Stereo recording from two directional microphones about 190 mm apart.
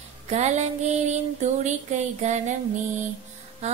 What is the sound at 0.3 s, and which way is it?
Music, 35° right (ahead or behind).